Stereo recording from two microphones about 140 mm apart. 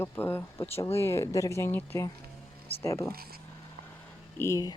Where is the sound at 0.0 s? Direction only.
15° left (ahead or behind).